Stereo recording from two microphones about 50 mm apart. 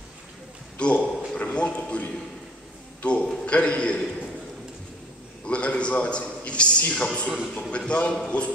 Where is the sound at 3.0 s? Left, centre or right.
Left.